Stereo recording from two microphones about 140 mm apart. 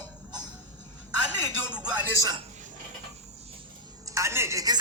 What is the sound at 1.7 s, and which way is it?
Speech, 10° right (ahead or behind).